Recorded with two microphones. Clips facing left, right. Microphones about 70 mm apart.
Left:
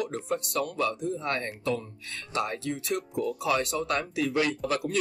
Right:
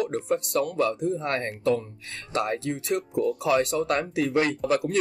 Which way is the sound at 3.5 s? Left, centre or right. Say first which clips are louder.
Right 4 dB; right.